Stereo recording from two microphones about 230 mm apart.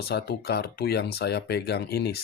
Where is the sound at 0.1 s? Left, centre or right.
Left.